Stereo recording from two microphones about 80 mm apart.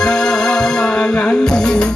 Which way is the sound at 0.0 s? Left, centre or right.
Centre.